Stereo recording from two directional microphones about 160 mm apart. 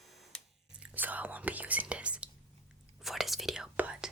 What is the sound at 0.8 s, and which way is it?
Whispering, 10° right (ahead or behind).